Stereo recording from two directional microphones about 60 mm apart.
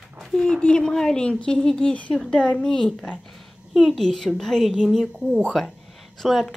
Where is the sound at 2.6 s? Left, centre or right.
Centre.